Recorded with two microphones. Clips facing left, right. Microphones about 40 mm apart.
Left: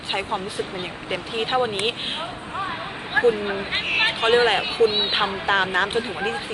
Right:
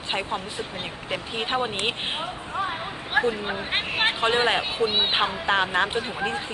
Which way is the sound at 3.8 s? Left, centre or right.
Left.